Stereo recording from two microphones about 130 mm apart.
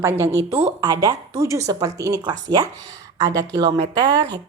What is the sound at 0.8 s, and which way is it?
A woman's voice, 30° right (ahead or behind).